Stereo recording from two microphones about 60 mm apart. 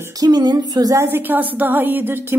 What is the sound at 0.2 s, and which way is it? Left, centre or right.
Female singing, right.